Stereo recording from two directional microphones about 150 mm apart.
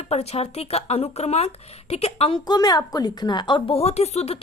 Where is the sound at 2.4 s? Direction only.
25° left (ahead or behind); by 4.4 s 45° left (ahead or behind).